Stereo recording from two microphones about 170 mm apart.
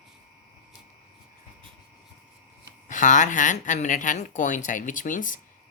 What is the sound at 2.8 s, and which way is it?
Speech, 45° left (ahead or behind).